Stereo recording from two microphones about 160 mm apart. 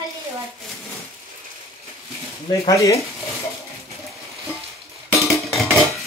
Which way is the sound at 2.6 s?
20° left (ahead or behind).